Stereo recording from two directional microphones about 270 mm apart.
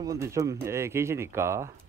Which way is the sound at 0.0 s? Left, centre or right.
Centre.